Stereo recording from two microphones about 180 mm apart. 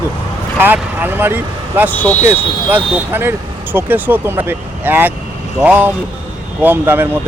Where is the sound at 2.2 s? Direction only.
10° right (ahead or behind).